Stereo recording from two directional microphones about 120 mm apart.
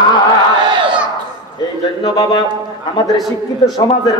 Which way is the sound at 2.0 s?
35° left (ahead or behind).